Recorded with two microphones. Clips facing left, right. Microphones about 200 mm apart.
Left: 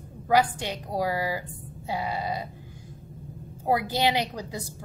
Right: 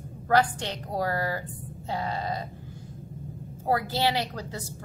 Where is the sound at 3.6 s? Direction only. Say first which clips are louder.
Left 1 dB; 15° left (ahead or behind).